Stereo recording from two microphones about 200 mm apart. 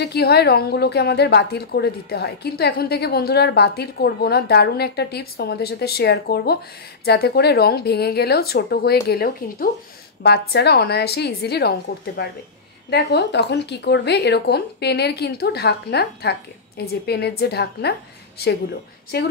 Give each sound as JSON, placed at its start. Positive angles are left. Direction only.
{"t": 0.0, "sound": "a woman's voice", "side_deg": 55}